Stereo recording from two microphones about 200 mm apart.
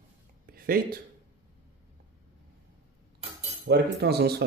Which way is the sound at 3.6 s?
55° right (ahead or behind).